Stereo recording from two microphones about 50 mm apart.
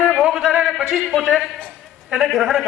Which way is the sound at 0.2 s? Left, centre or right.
Centre.